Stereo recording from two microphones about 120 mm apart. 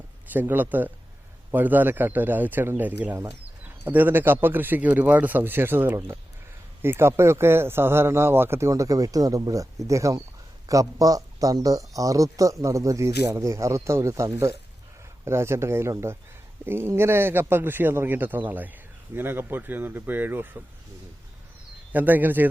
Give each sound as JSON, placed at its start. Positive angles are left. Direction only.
{"t": 0.3, "sound": "speech", "side_deg": -15}
{"t": 21.9, "sound": "speech", "side_deg": -15}